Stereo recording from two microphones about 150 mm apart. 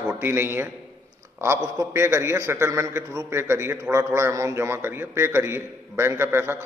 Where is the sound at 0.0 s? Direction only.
15° right (ahead or behind).